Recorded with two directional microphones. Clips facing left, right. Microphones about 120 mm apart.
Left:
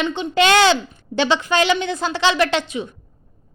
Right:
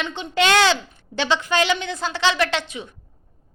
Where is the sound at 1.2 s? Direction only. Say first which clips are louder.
Left 2 dB; 15° left (ahead or behind).